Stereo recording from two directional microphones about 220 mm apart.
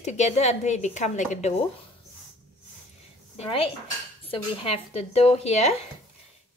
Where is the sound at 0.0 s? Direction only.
30° left (ahead or behind).